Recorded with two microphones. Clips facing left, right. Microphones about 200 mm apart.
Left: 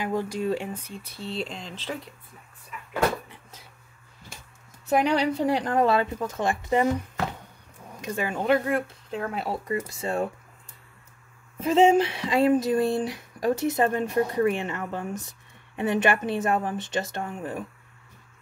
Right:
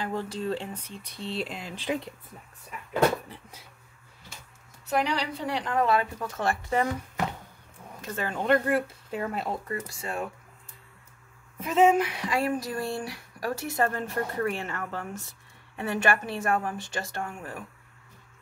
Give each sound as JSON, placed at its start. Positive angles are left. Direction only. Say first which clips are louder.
{"t": 0.0, "sound": "speech", "louder": "left 4 dB", "side_deg": 15}
{"t": 4.8, "sound": "a woman's voice", "louder": "left 5 dB", "side_deg": 50}
{"t": 5.9, "sound": "speech", "louder": "left 3 dB", "side_deg": 25}
{"t": 8.0, "sound": "speech", "louder": "left 3 dB", "side_deg": 10}
{"t": 9.7, "sound": "speech", "louder": "left 6 dB", "side_deg": 20}
{"t": 11.6, "sound": "speech", "louder": "left 3 dB", "side_deg": 30}